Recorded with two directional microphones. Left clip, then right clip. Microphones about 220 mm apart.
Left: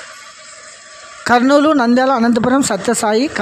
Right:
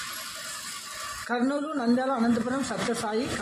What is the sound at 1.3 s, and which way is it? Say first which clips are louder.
Speech: left 18 dB; 50° left (ahead or behind).